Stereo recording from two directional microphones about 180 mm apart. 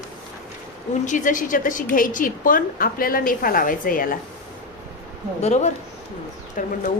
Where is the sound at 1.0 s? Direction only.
45° left (ahead or behind).